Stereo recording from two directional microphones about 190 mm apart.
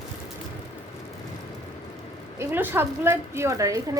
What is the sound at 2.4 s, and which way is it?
A woman's voice, 10° right (ahead or behind).